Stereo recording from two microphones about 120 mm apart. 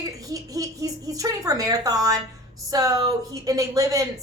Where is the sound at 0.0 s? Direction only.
30° right (ahead or behind).